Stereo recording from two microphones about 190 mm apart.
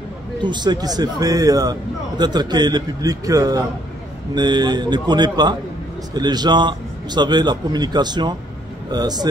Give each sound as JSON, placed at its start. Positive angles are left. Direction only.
{"t": 0.4, "sound": "speech", "side_deg": -25}